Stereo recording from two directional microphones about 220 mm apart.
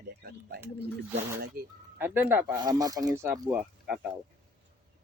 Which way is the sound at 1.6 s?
45° right (ahead or behind).